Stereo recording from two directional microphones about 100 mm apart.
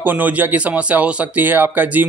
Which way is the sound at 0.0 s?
15° right (ahead or behind).